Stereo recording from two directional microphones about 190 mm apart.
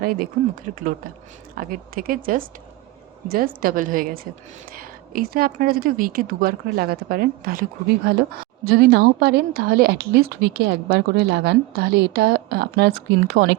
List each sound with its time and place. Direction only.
0.0 s a woman's voice: 50° right (ahead or behind); by 13.6 s 65° right (ahead or behind)